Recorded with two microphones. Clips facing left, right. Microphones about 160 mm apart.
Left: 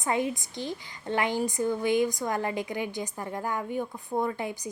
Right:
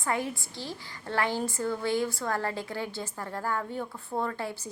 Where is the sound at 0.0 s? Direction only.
20° left (ahead or behind).